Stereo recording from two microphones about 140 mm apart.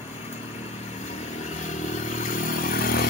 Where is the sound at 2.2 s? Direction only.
75° left (ahead or behind); by 3.0 s 90° left.